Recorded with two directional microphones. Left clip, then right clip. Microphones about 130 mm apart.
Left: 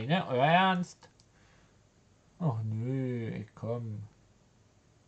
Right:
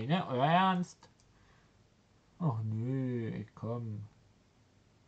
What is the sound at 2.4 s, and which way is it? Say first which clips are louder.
Speech: left 2 dB; 15° left (ahead or behind).